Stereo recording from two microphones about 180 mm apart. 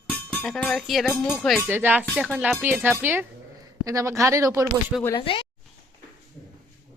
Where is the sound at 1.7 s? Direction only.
10° right (ahead or behind).